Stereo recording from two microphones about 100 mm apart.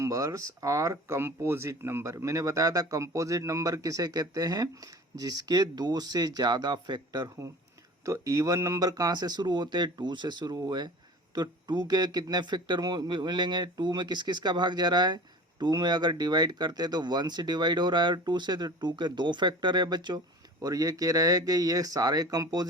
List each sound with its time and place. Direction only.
0.0 s speech: 35° right (ahead or behind)
8.0 s speech: 35° right (ahead or behind)